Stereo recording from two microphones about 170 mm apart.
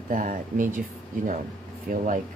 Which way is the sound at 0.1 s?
50° right (ahead or behind).